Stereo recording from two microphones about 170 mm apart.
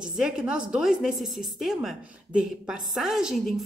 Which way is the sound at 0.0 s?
5° right (ahead or behind).